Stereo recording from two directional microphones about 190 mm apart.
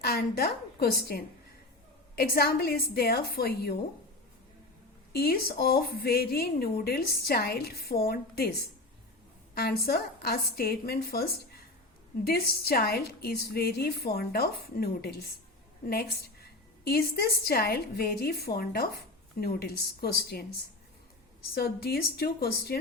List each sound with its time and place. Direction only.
0.0 s a woman's voice: 55° left (ahead or behind)
5.1 s a woman's voice: 55° left (ahead or behind)
21.5 s a woman's voice: 55° left (ahead or behind)